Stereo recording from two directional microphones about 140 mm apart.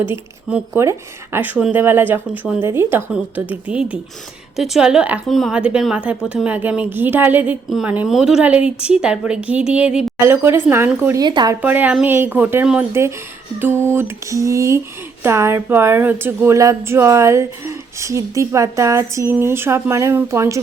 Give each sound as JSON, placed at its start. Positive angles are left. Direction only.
{"t": 0.8, "sound": "a woman's voice", "side_deg": -20}
{"t": 10.2, "sound": "speech", "side_deg": -20}
{"t": 11.2, "sound": "speech", "side_deg": -30}
{"t": 11.6, "sound": "speech", "side_deg": -10}